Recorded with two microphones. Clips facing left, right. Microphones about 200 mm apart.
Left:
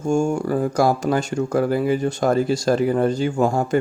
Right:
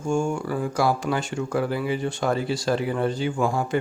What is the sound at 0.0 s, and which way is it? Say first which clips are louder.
Speech: left 5 dB; 40° left (ahead or behind).